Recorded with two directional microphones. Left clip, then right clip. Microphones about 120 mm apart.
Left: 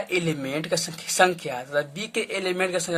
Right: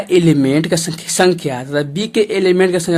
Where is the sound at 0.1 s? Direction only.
30° right (ahead or behind).